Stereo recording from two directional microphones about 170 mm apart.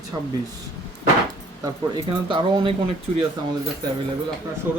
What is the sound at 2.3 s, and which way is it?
Speech, 30° right (ahead or behind).